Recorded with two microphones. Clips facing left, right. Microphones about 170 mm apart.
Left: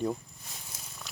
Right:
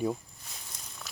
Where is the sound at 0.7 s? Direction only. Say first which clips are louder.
Right 1 dB; 5° left (ahead or behind).